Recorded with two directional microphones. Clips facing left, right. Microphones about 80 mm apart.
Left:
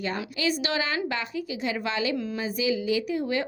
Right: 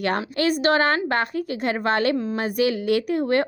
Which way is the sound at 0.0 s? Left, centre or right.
Right.